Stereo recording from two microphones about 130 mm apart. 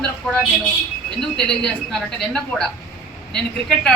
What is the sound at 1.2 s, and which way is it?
Speech, 5° left (ahead or behind).